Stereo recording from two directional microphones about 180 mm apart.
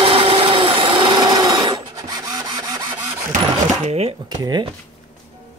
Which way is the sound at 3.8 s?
35° right (ahead or behind).